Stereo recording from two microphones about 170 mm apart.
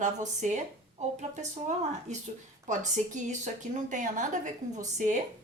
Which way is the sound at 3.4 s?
45° right (ahead or behind).